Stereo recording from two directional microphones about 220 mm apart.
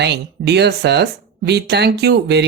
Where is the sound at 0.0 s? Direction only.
50° right (ahead or behind).